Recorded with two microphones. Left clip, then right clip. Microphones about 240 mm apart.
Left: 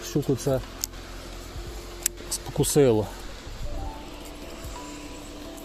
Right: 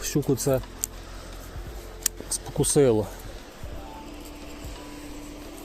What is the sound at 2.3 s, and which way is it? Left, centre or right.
Speech, centre.